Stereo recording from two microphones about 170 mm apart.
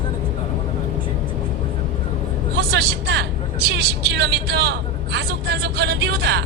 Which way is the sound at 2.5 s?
70° right (ahead or behind).